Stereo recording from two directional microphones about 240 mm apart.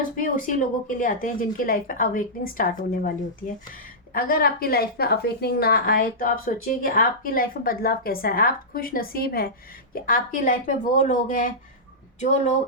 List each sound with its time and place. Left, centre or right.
0.2 s a woman's voice: left